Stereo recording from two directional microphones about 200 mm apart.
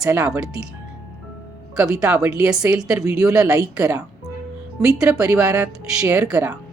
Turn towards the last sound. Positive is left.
turn(degrees=-5)  # may be behind; listen again after turning